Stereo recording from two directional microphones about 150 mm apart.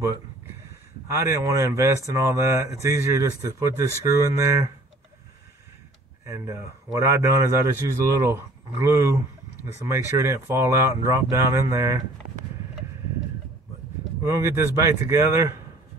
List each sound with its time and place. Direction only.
1.1 s a man's voice: 20° right (ahead or behind)
6.2 s a man's voice: 20° right (ahead or behind)
14.2 s a man's voice: 20° right (ahead or behind)